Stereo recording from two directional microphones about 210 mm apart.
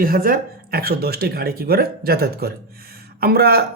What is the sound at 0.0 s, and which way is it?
Speech, 45° right (ahead or behind).